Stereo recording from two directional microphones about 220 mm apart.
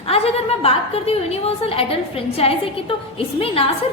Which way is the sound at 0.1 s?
25° left (ahead or behind).